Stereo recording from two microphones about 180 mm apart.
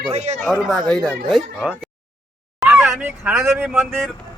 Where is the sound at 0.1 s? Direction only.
40° right (ahead or behind).